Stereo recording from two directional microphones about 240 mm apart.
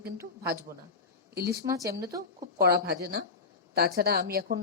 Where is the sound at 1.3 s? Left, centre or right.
Right.